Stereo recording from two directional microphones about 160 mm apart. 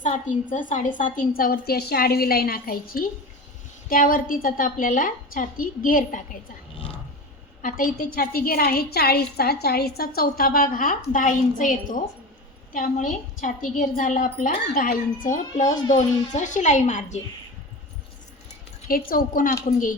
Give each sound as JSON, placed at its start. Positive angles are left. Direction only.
{"t": 0.5, "sound": "a woman's voice", "side_deg": 55}
{"t": 7.6, "sound": "a woman's voice", "side_deg": 60}
{"t": 14.5, "sound": "a woman's voice", "side_deg": 75}
{"t": 15.6, "sound": "speech", "side_deg": 25}
{"t": 16.0, "sound": "speech", "side_deg": 50}
{"t": 18.9, "sound": "a woman's voice", "side_deg": 65}